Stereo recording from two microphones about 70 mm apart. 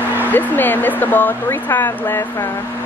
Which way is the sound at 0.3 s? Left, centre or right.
Left.